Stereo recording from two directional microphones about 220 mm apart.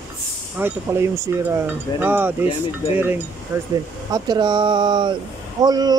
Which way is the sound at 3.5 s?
10° right (ahead or behind).